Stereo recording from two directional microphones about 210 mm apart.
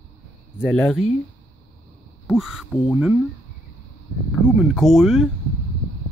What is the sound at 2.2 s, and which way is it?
Speech, centre (ahead or behind).